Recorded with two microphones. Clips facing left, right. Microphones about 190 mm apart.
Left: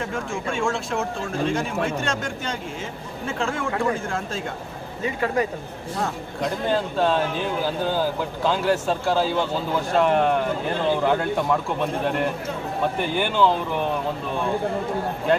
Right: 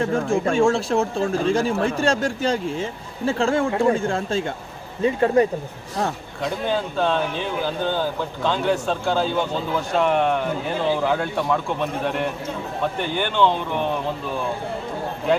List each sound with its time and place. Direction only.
0.0 s speech: 35° right (ahead or behind)
6.4 s speech: centre (ahead or behind)